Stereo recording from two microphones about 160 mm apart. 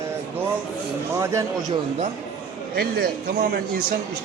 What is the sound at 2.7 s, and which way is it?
Speech, 70° right (ahead or behind).